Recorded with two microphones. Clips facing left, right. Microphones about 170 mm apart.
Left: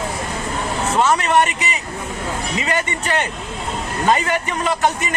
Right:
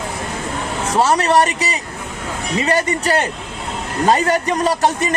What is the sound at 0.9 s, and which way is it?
Speech, 35° right (ahead or behind).